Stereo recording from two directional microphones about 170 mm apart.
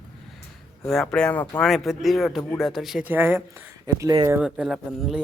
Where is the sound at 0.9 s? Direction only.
5° left (ahead or behind); by 4.4 s 20° right (ahead or behind).